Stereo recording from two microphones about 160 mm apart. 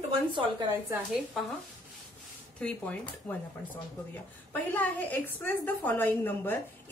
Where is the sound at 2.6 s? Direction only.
10° left (ahead or behind).